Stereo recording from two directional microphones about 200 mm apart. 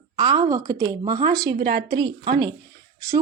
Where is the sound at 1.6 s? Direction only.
60° right (ahead or behind).